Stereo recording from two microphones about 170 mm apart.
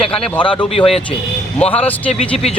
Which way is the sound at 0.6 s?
30° left (ahead or behind).